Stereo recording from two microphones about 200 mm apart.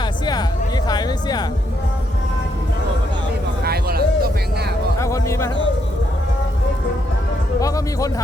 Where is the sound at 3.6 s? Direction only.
50° right (ahead or behind).